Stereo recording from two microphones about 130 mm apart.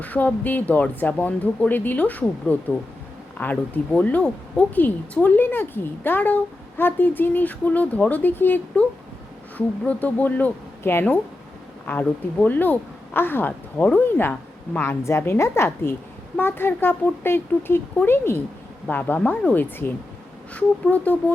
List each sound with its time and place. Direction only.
0.0 s speech: 10° left (ahead or behind)